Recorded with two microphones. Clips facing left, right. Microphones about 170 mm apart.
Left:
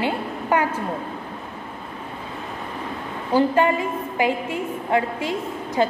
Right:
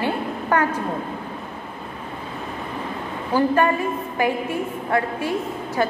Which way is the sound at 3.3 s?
15° left (ahead or behind).